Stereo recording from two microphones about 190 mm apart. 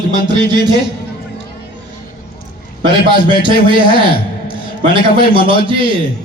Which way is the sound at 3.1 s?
25° right (ahead or behind).